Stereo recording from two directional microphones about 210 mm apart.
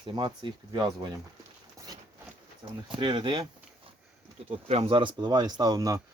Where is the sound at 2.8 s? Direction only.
20° right (ahead or behind).